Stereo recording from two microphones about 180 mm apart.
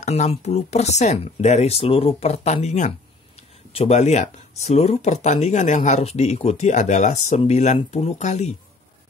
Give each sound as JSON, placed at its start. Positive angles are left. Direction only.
{"t": 0.0, "sound": "speech", "side_deg": 35}